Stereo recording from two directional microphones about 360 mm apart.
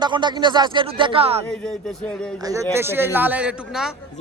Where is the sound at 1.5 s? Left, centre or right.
Centre.